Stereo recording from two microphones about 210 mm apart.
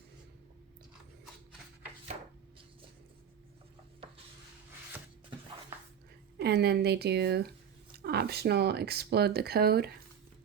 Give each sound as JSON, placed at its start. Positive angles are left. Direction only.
{"t": 6.4, "sound": "speech", "side_deg": -50}